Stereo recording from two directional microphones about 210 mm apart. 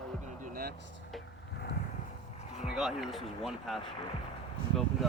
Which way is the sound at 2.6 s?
Centre (ahead or behind).